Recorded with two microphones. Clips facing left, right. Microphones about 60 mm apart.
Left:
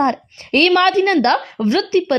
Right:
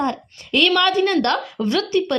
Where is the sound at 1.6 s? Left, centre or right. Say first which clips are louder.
Left 2 dB; left.